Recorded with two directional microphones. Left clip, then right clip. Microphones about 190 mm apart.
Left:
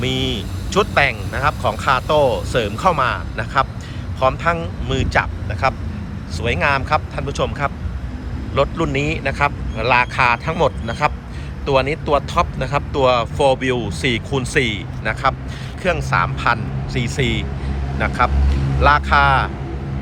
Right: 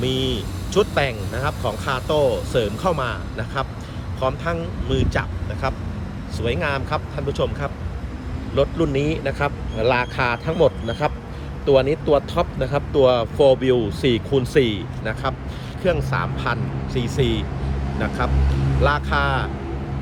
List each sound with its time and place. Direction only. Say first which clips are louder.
0.0 s speech: left 2 dB; 15° right (ahead or behind)